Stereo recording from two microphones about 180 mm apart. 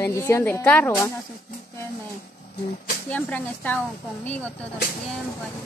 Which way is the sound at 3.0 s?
10° left (ahead or behind).